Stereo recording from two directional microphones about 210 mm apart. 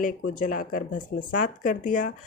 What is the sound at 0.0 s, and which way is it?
Speech, 40° left (ahead or behind).